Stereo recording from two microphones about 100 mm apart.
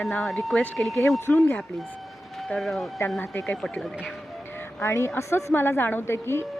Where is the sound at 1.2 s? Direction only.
15° left (ahead or behind).